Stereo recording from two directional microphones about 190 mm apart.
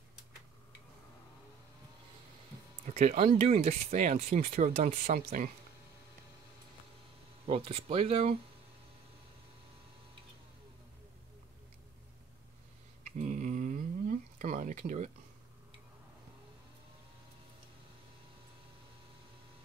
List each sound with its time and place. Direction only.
2.9 s speech: 35° right (ahead or behind)
7.4 s speech: 30° right (ahead or behind)
13.0 s a sound: 40° right (ahead or behind)